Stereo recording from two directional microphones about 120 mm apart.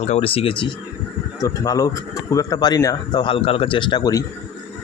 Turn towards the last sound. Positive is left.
turn(degrees=35)  # may be behind; listen again after turning